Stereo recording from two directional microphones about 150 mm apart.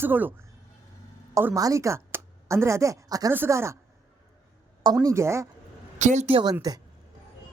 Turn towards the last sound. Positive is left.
turn(degrees=-25)  # may be behind; listen again after turning